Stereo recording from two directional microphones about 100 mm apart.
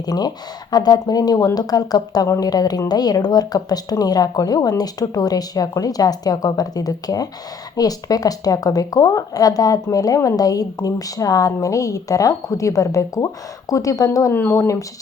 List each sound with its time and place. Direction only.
0.0 s a woman's voice: 40° left (ahead or behind)